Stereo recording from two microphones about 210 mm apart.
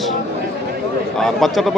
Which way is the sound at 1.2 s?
Centre (ahead or behind).